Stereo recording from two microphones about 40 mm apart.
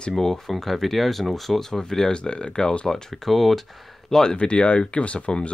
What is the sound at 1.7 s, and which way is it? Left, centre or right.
Speech, centre.